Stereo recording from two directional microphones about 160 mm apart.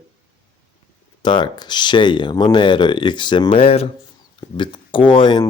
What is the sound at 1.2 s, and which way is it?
Speech, 30° left (ahead or behind).